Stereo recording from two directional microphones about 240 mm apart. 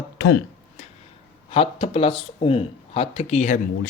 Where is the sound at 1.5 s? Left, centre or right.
Left.